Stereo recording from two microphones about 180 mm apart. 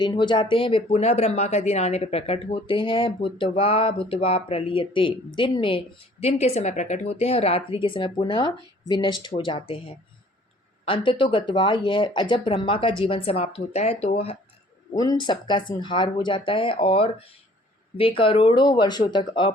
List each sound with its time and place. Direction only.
0.0 s speech: 25° left (ahead or behind)
14.9 s speech: 20° left (ahead or behind)